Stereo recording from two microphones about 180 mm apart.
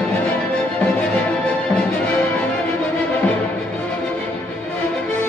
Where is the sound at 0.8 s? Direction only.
5° left (ahead or behind).